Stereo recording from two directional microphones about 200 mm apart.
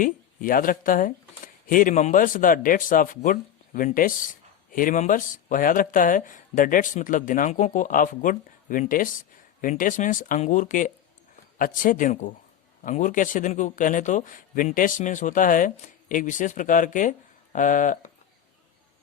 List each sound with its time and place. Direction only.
0.0 s speech: 45° left (ahead or behind)